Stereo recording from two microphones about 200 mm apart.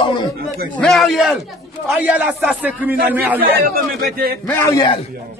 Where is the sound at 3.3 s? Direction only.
50° right (ahead or behind).